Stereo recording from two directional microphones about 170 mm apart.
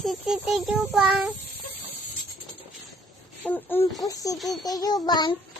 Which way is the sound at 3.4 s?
10° left (ahead or behind).